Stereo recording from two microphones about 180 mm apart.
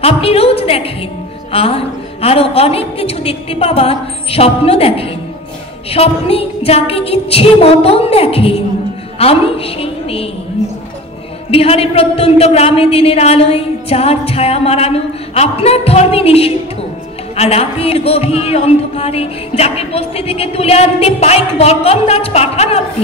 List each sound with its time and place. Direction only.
0.0 s a woman's voice: 35° left (ahead or behind)
11.5 s speech: 30° left (ahead or behind)